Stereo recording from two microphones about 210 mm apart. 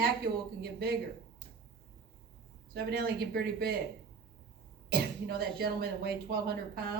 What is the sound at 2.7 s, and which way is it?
A woman's voice, 45° right (ahead or behind).